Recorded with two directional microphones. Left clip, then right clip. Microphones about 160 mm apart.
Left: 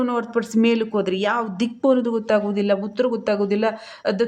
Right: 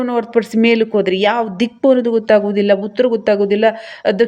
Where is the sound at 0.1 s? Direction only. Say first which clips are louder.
Right 7 dB; 20° right (ahead or behind).